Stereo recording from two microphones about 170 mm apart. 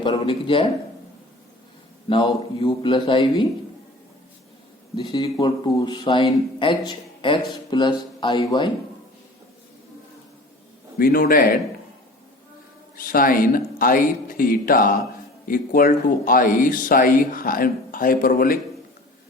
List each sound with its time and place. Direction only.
0.0 s speech: 30° left (ahead or behind)
2.0 s speech: 30° left (ahead or behind)
4.9 s speech: 30° left (ahead or behind)
10.9 s speech: 60° left (ahead or behind)
13.0 s speech: 55° left (ahead or behind)